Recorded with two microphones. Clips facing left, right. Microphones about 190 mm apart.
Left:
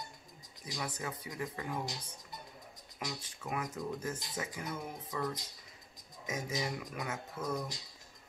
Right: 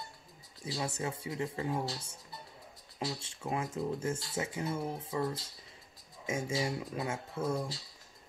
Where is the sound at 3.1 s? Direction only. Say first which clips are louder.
Right 3 dB; 25° right (ahead or behind).